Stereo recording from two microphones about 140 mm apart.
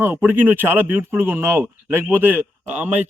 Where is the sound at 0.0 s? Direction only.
15° right (ahead or behind).